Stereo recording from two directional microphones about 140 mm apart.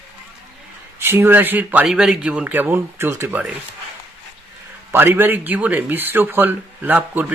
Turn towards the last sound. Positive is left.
turn(degrees=-10)  # may be behind; listen again after turning